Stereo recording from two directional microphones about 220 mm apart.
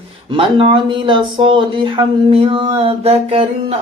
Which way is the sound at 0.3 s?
25° right (ahead or behind).